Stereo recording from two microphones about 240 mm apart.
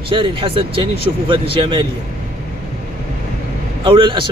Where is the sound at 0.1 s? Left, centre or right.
Right.